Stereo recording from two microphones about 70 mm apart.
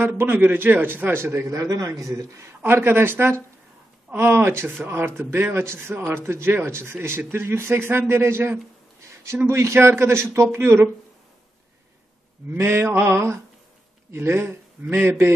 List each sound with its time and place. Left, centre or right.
0.2 s speech: right
2.6 s speech: right
12.5 s speech: right